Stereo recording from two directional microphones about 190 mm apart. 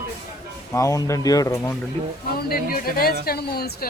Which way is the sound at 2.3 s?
55° left (ahead or behind).